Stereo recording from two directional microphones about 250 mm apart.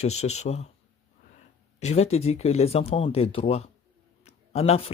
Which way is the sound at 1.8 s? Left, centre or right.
Left.